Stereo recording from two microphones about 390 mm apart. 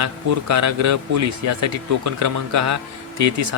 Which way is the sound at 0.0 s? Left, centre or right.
Right.